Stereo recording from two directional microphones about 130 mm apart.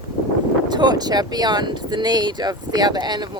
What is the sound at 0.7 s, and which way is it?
Speech, 30° right (ahead or behind).